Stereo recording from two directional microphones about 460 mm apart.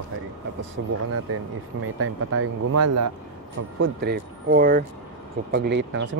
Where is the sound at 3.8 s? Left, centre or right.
Right.